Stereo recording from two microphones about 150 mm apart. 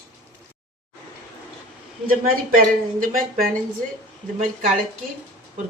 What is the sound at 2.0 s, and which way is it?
Speech, 65° right (ahead or behind).